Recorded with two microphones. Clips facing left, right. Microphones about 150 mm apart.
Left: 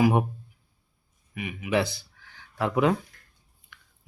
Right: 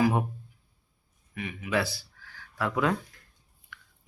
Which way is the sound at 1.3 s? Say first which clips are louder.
Left 3 dB; 15° left (ahead or behind).